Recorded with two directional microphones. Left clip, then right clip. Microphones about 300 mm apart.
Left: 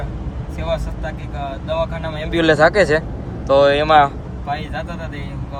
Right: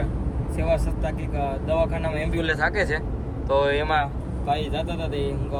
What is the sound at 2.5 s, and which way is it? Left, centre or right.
Speech, centre.